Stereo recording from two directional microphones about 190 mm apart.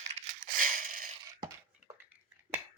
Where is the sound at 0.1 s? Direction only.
45° right (ahead or behind).